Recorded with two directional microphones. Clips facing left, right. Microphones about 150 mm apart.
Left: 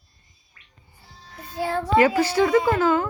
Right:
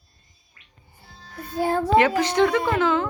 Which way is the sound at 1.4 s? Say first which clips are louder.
Right 3 dB; 50° right (ahead or behind).